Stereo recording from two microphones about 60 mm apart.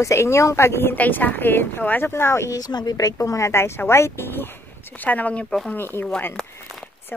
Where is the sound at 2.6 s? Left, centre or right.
Left.